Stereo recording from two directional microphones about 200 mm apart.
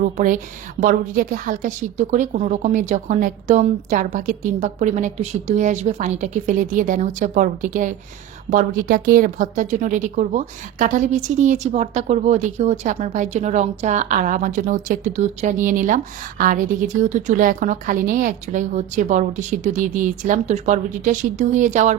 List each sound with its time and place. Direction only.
0.0 s speech: 40° right (ahead or behind)